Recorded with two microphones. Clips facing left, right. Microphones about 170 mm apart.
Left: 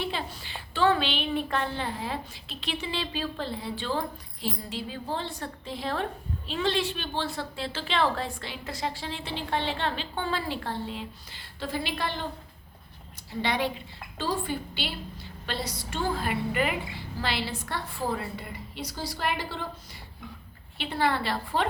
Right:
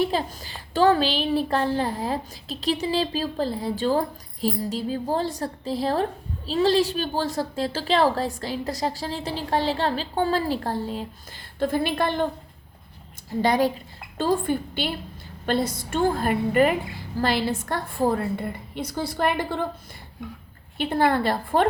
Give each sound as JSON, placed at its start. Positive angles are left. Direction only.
{"t": 0.0, "sound": "a woman's voice", "side_deg": -40}
{"t": 13.4, "sound": "a woman's voice", "side_deg": -40}
{"t": 20.7, "sound": "a woman's voice", "side_deg": -45}